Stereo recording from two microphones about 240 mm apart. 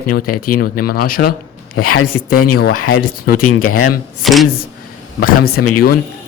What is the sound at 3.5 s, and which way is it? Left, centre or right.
Speech, left.